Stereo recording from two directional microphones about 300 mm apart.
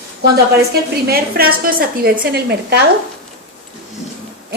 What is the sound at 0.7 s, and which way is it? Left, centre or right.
A woman's voice, right.